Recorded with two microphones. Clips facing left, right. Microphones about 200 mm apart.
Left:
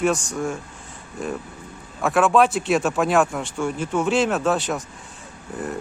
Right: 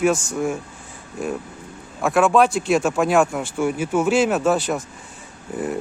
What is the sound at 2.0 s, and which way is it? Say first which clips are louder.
Speech: right 1 dB; centre (ahead or behind).